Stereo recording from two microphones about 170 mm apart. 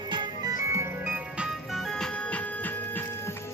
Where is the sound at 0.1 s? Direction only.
25° right (ahead or behind); by 3.3 s 10° left (ahead or behind).